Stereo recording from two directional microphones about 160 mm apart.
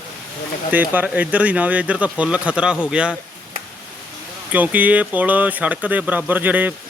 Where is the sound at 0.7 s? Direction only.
10° right (ahead or behind).